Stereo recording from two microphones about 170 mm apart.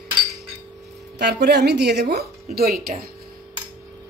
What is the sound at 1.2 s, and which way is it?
A woman's voice, 80° right.